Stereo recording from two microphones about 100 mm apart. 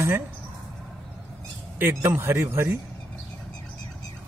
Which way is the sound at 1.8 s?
30° right (ahead or behind).